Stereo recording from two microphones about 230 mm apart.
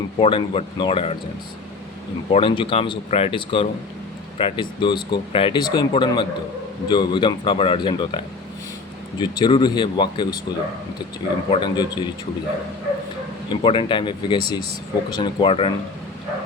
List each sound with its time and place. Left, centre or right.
0.2 s speech: left
2.3 s speech: left
11.5 s speech: centre
13.5 s speech: left